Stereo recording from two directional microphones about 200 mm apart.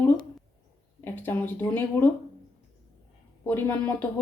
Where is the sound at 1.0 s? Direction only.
10° left (ahead or behind).